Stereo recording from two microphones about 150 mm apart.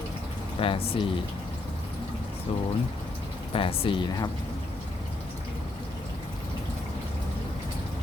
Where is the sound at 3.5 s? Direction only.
35° left (ahead or behind).